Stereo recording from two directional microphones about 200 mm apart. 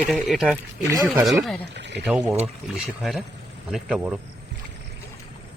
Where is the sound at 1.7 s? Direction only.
60° right (ahead or behind).